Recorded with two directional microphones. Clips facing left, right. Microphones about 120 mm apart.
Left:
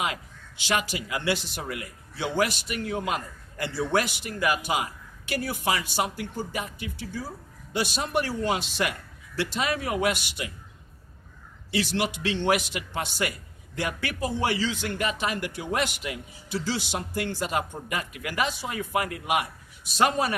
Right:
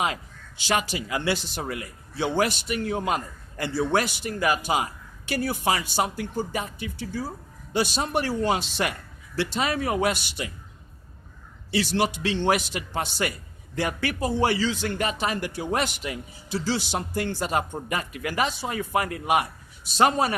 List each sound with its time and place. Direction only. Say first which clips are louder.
0.0 s a man's voice: right 3 dB; 30° right (ahead or behind)
7.7 s a man's voice: right 2 dB; 35° right (ahead or behind)
11.7 s a man's voice: right 3 dB; 35° right (ahead or behind)